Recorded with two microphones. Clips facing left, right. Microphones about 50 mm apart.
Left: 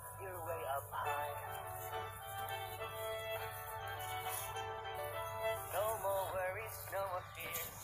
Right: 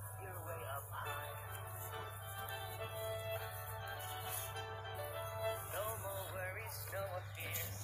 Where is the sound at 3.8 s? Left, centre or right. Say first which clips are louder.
Left 4 dB; left.